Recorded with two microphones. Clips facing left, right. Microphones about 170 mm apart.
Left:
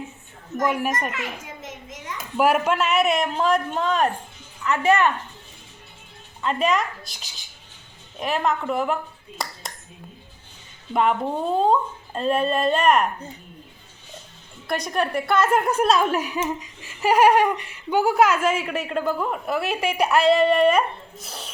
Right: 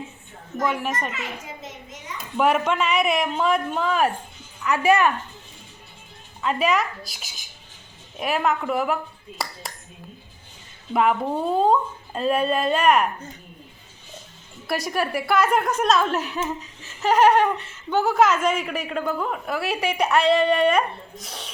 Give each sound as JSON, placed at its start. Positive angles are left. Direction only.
{"t": 0.7, "sound": "a child's voice", "side_deg": 10}
{"t": 1.6, "sound": "a sound", "side_deg": 90}
{"t": 2.4, "sound": "a woman's voice", "side_deg": 5}
{"t": 6.4, "sound": "a woman's voice", "side_deg": -5}
{"t": 10.9, "sound": "a woman's voice", "side_deg": 0}
{"t": 14.7, "sound": "a woman's voice", "side_deg": -5}